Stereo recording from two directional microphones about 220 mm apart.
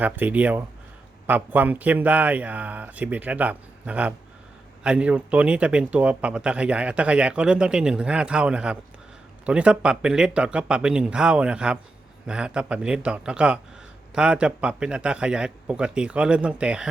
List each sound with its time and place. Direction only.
0.0 s speech: 5° right (ahead or behind)